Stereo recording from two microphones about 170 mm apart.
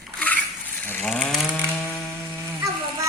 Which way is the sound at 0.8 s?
10° left (ahead or behind).